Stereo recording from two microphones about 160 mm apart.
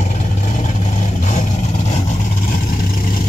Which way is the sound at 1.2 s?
50° left (ahead or behind).